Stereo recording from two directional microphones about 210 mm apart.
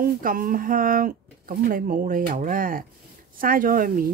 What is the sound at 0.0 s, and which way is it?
A woman's voice, 40° right (ahead or behind).